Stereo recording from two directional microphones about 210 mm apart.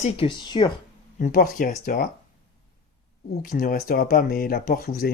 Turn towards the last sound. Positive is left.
turn(degrees=45)  # may be behind; listen again after turning